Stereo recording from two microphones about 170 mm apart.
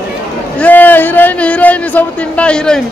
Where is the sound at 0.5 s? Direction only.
10° left (ahead or behind).